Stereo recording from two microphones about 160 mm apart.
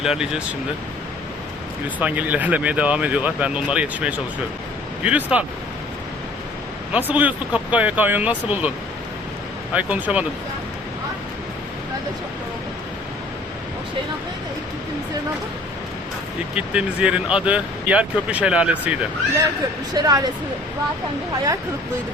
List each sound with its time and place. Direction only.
0.0 s speech: 5° right (ahead or behind)
2.0 s speech: 10° right (ahead or behind)
6.9 s speech: 10° right (ahead or behind)
9.7 s speech: 10° right (ahead or behind)
16.6 s speech: 5° right (ahead or behind)
19.9 s speech: 25° right (ahead or behind)